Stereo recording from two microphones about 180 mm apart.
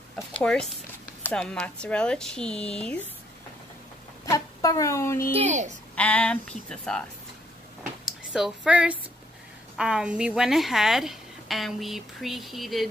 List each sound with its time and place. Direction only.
0.3 s a woman's voice: 5° left (ahead or behind)
4.3 s a sound: 20° left (ahead or behind)
5.3 s speech: 40° right (ahead or behind)
5.9 s speech: 5° left (ahead or behind)
8.0 s a sound: 5° right (ahead or behind)
9.8 s a woman's voice: 5° right (ahead or behind)